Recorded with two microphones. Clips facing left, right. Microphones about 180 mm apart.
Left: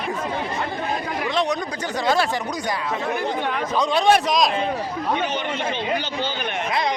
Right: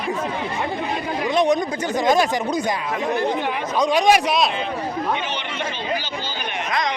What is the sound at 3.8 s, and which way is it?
Speech, 15° right (ahead or behind).